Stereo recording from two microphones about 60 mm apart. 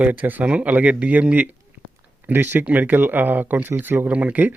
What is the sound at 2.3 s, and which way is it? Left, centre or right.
Speech, right.